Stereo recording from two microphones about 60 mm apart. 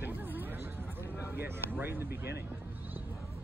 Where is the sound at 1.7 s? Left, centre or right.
Right.